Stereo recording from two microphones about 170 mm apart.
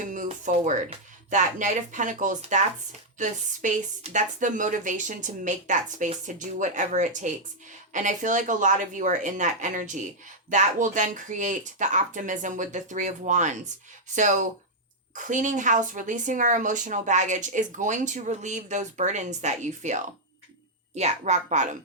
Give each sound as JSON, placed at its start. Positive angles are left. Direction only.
{"t": 0.0, "sound": "a sound", "side_deg": -50}
{"t": 0.9, "sound": "speech", "side_deg": -45}
{"t": 15.1, "sound": "speech", "side_deg": -45}